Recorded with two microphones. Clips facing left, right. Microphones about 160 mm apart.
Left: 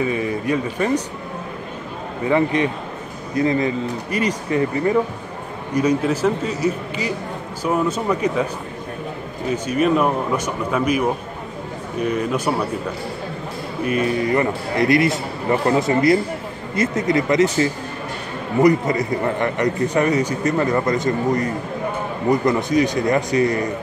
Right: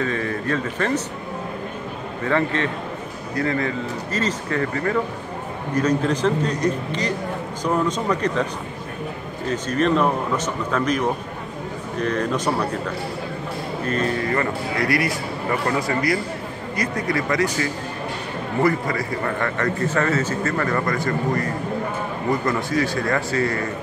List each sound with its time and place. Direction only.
0.0 s speech: 10° left (ahead or behind)
2.2 s speech: 15° left (ahead or behind)
9.5 s speech: 10° left (ahead or behind)
13.8 s a man's voice: 10° left (ahead or behind)